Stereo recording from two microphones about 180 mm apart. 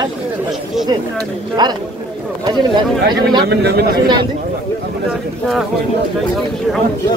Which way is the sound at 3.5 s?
65° right (ahead or behind).